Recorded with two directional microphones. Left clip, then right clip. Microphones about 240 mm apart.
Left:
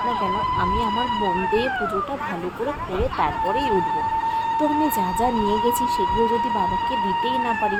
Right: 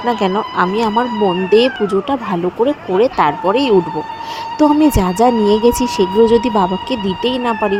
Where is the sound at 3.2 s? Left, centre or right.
Right.